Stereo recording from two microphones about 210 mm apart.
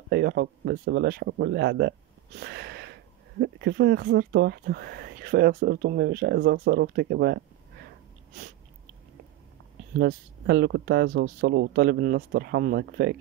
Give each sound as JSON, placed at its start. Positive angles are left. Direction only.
{"t": 0.1, "sound": "speech", "side_deg": -45}
{"t": 9.9, "sound": "speech", "side_deg": -50}